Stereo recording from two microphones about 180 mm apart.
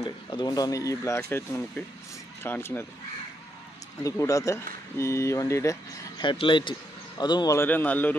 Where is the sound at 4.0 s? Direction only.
20° left (ahead or behind).